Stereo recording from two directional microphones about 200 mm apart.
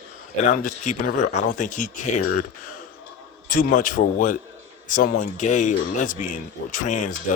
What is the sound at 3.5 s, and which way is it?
Speech, 40° left (ahead or behind).